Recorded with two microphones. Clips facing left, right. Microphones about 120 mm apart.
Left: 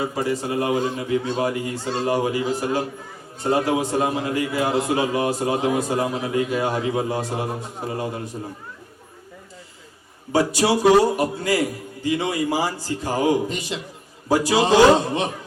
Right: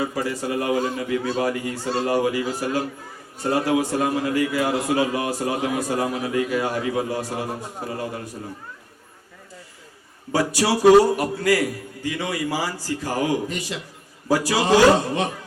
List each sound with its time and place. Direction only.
0.0 s a man's voice: 25° left (ahead or behind)
10.3 s a man's voice: 25° left (ahead or behind)